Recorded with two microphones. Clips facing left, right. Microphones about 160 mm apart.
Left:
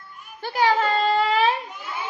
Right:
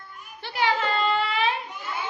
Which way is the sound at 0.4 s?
45° left (ahead or behind).